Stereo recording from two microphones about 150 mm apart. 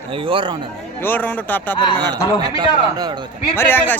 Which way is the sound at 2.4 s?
30° right (ahead or behind).